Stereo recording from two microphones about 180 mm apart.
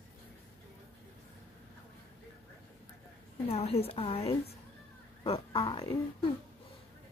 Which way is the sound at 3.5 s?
35° left (ahead or behind).